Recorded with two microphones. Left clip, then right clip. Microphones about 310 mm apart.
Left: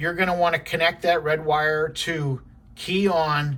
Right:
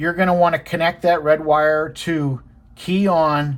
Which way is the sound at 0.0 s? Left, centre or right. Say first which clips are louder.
Right 5 dB; centre.